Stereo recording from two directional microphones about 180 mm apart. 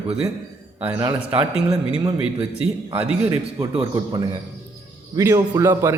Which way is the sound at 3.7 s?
30° right (ahead or behind).